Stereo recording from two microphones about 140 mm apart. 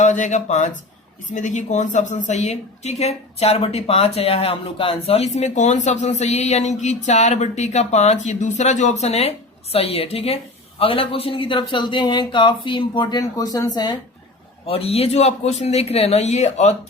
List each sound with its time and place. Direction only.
0.0 s a woman's voice: 60° left (ahead or behind); by 13.9 s 30° left (ahead or behind)
14.7 s speech: 45° left (ahead or behind)